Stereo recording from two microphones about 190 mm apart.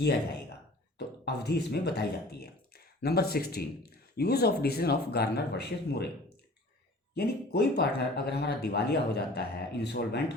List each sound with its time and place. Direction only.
0.9 s speech: 60° left (ahead or behind)
7.1 s speech: 60° left (ahead or behind)